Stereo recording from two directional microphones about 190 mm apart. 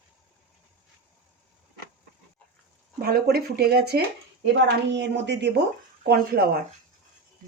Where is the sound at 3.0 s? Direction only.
55° right (ahead or behind).